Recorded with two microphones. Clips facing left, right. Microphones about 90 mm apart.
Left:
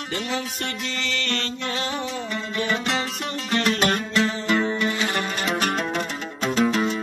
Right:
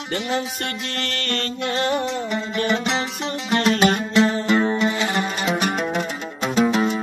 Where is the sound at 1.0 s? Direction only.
50° right (ahead or behind).